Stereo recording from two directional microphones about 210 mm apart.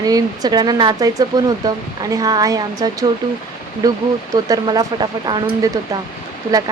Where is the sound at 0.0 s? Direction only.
15° right (ahead or behind).